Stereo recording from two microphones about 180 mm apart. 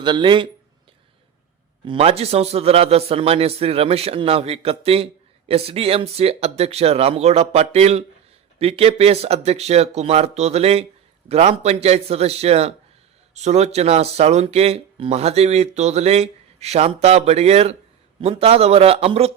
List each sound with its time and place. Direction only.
0.0 s speech: 25° right (ahead or behind)
1.8 s speech: 30° right (ahead or behind)